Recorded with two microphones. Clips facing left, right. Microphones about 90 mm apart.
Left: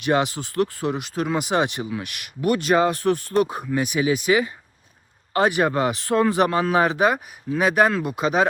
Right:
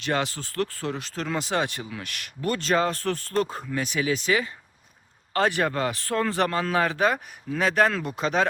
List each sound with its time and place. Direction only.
0.0 s speech: 15° left (ahead or behind)